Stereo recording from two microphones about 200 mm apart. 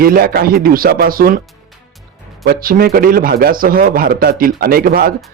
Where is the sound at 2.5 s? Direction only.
50° right (ahead or behind).